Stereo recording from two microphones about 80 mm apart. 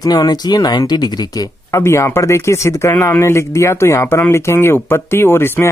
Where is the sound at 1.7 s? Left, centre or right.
Left.